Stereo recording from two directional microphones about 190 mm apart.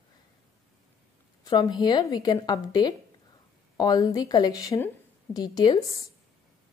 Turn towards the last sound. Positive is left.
turn(degrees=20)  # may be behind; listen again after turning